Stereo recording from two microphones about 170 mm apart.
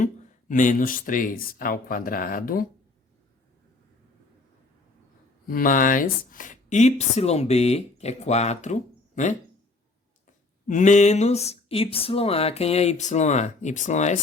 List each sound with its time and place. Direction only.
0.0 s speech: 50° left (ahead or behind)
5.5 s speech: 55° left (ahead or behind)
10.7 s speech: 45° left (ahead or behind)